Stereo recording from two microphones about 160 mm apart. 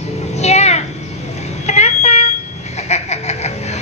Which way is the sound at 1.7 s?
45° left (ahead or behind).